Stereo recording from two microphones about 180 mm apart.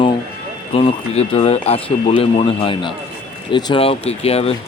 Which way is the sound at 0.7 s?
35° left (ahead or behind).